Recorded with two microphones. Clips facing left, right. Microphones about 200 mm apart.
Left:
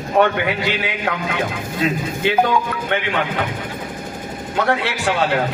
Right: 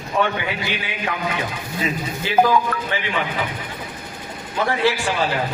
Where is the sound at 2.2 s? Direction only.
65° left (ahead or behind).